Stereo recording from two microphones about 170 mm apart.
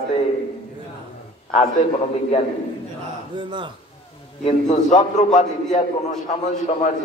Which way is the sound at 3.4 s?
30° right (ahead or behind).